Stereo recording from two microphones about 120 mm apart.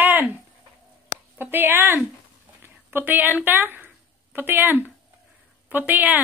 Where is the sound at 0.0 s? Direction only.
15° right (ahead or behind).